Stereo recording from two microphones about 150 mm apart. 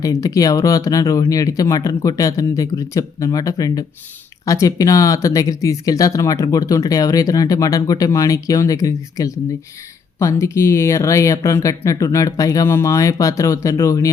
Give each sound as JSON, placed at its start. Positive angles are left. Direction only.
{"t": 0.0, "sound": "speech", "side_deg": 20}